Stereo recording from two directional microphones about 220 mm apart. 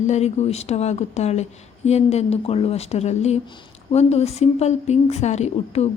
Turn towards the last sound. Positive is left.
turn(degrees=30)  # may be behind; listen again after turning